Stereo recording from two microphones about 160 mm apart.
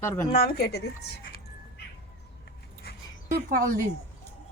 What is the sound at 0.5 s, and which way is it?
Speech, 75° left (ahead or behind).